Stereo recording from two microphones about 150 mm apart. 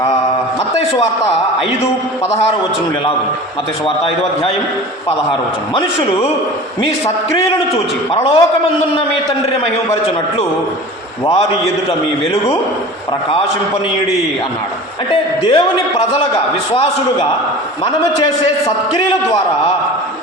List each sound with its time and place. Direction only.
3.8 s a man's voice: 40° left (ahead or behind)
7.7 s a man's voice: 40° left (ahead or behind)
15.4 s a man's voice: 35° left (ahead or behind)